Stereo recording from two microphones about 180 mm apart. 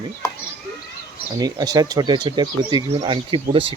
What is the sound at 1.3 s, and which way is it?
Speech, 20° right (ahead or behind).